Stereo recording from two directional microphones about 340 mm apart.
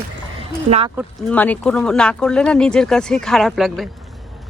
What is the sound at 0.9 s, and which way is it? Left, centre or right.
Speech, centre.